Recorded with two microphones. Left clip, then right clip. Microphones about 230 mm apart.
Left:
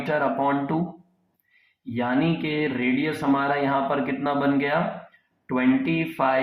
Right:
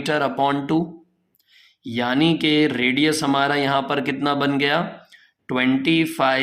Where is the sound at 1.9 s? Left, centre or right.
Right.